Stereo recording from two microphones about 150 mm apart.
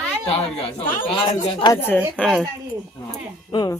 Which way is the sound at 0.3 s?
40° left (ahead or behind).